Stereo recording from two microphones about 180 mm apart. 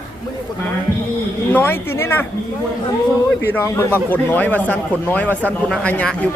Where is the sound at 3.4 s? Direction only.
10° left (ahead or behind).